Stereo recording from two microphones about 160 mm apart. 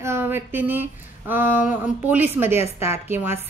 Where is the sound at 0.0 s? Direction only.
15° right (ahead or behind).